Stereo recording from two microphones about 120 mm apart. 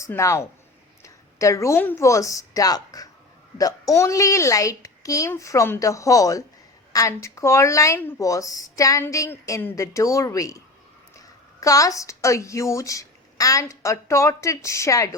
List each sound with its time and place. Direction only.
0.2 s a woman's voice: 25° left (ahead or behind)